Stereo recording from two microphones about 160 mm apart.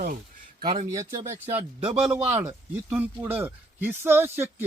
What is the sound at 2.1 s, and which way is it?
Speech, 15° right (ahead or behind).